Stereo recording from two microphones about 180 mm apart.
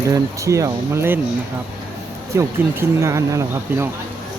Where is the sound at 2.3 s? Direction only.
15° right (ahead or behind).